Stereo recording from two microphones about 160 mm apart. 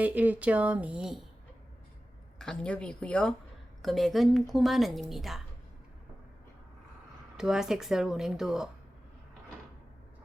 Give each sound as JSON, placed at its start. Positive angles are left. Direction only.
{"t": 0.0, "sound": "speech", "side_deg": -10}
{"t": 2.4, "sound": "a woman's voice", "side_deg": 5}
{"t": 7.3, "sound": "a woman's voice", "side_deg": -5}